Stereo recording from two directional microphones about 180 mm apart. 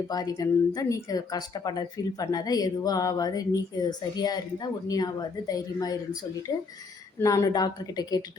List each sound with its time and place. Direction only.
0.1 s speech: 20° left (ahead or behind)
7.2 s speech: 15° left (ahead or behind)